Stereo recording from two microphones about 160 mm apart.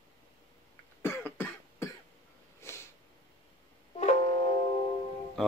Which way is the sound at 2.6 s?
15° left (ahead or behind).